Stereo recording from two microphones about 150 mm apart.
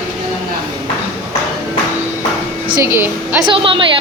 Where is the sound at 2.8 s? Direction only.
15° right (ahead or behind).